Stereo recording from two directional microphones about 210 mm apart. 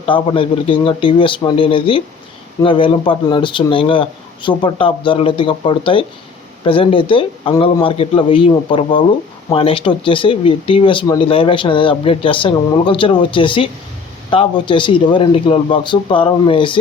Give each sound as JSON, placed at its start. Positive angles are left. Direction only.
{"t": 0.0, "sound": "speech", "side_deg": 25}